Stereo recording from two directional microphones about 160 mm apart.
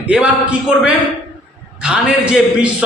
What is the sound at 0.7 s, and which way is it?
A man's voice, 5° right (ahead or behind).